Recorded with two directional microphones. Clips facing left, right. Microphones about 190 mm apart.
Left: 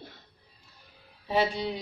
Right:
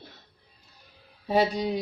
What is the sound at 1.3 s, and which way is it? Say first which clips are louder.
Speech: right 3 dB; 40° right (ahead or behind).